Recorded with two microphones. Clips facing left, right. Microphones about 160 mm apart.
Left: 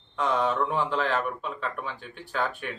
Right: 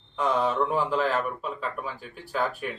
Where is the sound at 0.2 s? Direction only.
5° right (ahead or behind).